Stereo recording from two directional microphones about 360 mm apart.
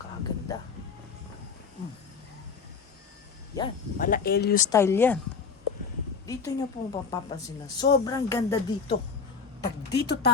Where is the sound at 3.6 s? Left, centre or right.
Centre.